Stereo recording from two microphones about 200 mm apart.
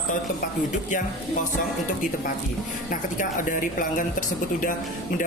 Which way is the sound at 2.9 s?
40° left (ahead or behind).